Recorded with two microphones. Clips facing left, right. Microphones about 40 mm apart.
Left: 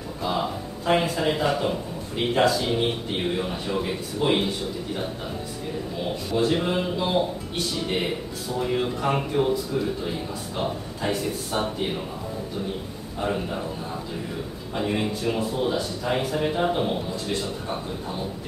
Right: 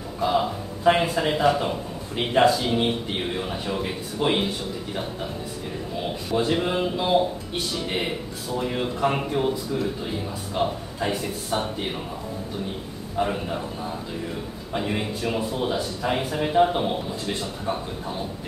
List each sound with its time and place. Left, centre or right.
0.2 s speech: centre
3.3 s speech: centre
6.3 s speech: centre
10.5 s speech: centre
13.2 s speech: centre
14.9 s speech: centre